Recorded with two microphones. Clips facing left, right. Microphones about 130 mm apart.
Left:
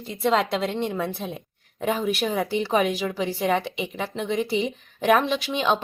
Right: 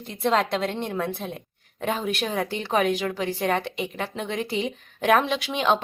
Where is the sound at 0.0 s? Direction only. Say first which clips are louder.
Left 1 dB; centre (ahead or behind).